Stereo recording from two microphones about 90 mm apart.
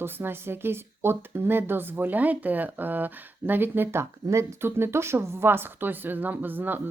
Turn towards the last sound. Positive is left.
turn(degrees=-20)  # may be behind; listen again after turning